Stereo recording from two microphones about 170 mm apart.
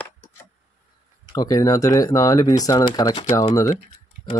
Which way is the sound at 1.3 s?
20° left (ahead or behind).